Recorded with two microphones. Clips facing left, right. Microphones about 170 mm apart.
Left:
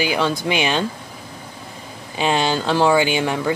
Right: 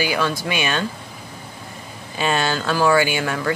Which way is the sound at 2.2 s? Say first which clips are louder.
Left 2 dB; 15° left (ahead or behind).